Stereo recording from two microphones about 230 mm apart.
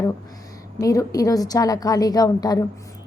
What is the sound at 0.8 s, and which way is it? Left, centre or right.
A woman's voice, centre.